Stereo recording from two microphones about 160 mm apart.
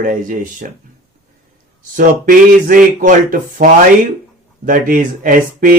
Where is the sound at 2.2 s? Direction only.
55° right (ahead or behind).